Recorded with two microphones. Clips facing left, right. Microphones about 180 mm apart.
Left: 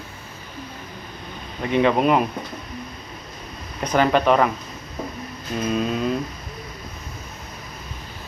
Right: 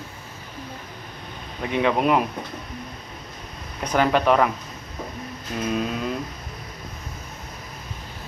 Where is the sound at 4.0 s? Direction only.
10° right (ahead or behind).